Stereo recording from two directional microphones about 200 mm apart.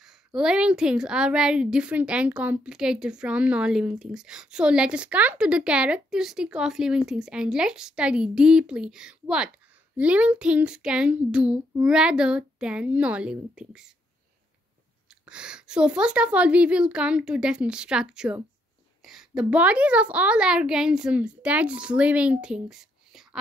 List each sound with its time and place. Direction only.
0.0 s a woman's voice: 5° right (ahead or behind)
15.2 s a woman's voice: 5° right (ahead or behind)